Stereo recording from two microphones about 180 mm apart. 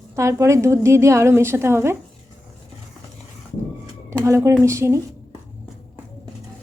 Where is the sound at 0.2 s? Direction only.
15° right (ahead or behind).